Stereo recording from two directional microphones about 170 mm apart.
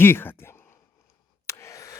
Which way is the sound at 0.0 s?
10° left (ahead or behind).